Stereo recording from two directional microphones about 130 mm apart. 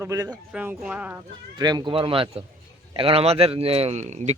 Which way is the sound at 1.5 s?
35° right (ahead or behind).